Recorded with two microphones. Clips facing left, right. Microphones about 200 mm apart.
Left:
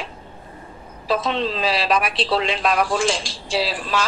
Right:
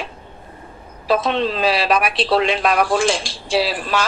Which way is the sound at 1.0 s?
60° right (ahead or behind).